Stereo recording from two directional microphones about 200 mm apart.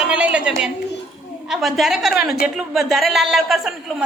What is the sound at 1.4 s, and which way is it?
A woman's voice, centre (ahead or behind).